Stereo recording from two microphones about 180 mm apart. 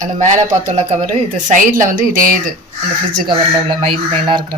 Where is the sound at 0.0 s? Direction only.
40° right (ahead or behind).